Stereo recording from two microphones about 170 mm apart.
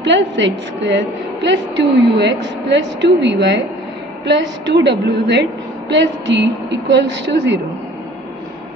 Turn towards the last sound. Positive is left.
turn(degrees=-90)